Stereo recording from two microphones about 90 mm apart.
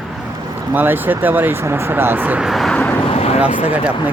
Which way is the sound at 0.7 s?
20° right (ahead or behind).